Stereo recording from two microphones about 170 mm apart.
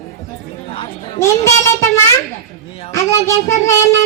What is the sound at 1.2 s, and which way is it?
Speech, 15° left (ahead or behind).